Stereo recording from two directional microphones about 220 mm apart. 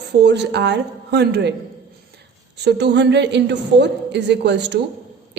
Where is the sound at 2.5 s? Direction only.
50° right (ahead or behind).